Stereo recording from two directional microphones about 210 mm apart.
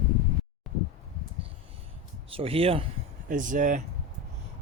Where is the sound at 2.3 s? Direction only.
25° right (ahead or behind).